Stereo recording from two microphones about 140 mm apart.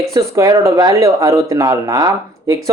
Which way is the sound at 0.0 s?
20° right (ahead or behind).